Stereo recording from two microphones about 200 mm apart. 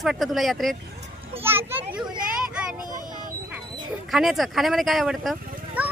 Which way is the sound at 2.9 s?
40° right (ahead or behind).